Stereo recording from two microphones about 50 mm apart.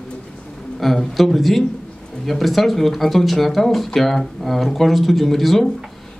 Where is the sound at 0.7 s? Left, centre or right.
Centre.